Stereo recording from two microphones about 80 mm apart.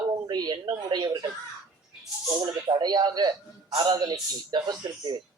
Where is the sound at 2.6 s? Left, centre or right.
Right.